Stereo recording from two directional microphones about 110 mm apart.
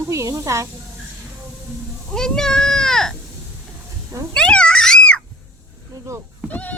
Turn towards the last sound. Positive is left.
turn(degrees=15)  # may be behind; listen again after turning